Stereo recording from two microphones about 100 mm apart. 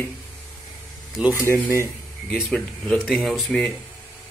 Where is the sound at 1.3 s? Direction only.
30° right (ahead or behind).